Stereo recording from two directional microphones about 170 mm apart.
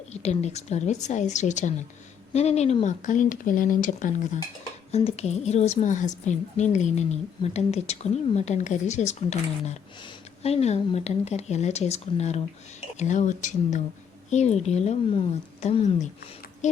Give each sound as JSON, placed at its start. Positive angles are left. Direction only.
{"t": 0.1, "sound": "speech", "side_deg": 40}
{"t": 4.9, "sound": "a woman's voice", "side_deg": 40}